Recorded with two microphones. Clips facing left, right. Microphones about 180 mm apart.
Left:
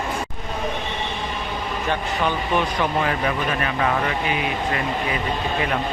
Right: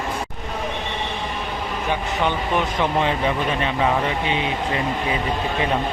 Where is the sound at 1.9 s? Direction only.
20° right (ahead or behind).